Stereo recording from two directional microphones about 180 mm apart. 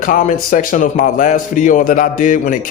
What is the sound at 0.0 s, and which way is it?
A man's voice, 45° left (ahead or behind).